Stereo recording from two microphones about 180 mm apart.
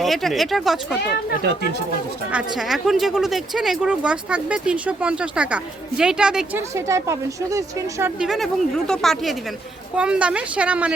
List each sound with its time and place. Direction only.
0.0 s speech: centre (ahead or behind)
2.3 s speech: centre (ahead or behind)
6.7 s a woman's voice: 15° right (ahead or behind)
8.2 s a woman's voice: centre (ahead or behind)